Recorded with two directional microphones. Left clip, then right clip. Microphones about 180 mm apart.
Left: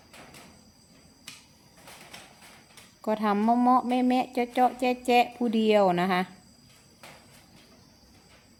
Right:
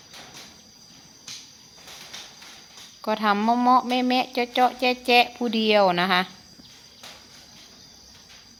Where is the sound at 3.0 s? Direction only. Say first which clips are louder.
Right 4 dB; 20° left (ahead or behind).